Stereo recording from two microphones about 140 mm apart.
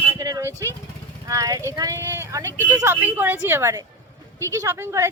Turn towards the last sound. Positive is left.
turn(degrees=-20)  # may be behind; listen again after turning